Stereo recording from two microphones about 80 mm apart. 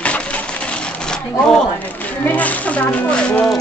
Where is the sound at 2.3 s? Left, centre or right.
Centre.